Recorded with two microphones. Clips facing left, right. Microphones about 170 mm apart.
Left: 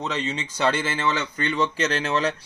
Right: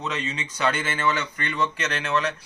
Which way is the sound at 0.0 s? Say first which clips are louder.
Left 2 dB; 25° left (ahead or behind).